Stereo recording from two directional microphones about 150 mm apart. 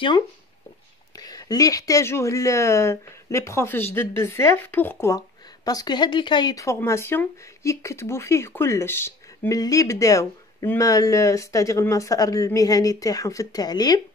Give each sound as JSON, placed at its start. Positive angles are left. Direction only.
{"t": 1.1, "sound": "speech", "side_deg": 25}
{"t": 5.7, "sound": "speech", "side_deg": 25}